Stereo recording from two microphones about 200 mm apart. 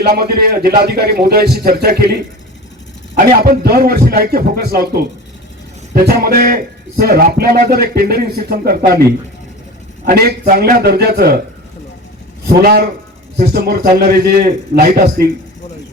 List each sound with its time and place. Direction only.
0.0 s a man's voice: 50° right (ahead or behind)
3.4 s a man's voice: 45° right (ahead or behind)
10.1 s a man's voice: 50° right (ahead or behind)
12.6 s a man's voice: 50° right (ahead or behind)